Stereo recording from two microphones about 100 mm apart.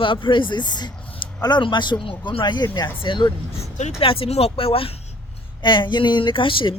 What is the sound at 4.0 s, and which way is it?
Speech, 65° left (ahead or behind).